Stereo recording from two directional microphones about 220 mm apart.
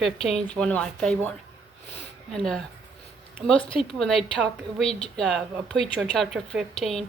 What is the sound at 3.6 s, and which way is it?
Speech, 25° left (ahead or behind).